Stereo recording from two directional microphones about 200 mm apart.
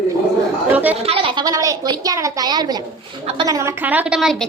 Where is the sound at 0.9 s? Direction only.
30° right (ahead or behind).